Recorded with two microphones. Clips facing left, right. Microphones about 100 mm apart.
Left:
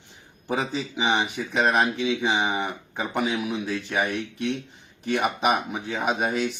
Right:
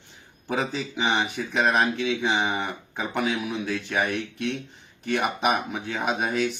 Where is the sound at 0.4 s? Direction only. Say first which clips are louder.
Even; 5° left (ahead or behind).